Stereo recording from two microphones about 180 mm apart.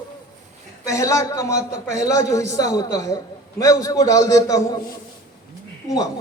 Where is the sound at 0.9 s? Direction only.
20° left (ahead or behind).